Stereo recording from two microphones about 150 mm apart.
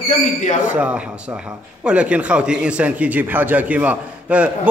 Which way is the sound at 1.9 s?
10° right (ahead or behind).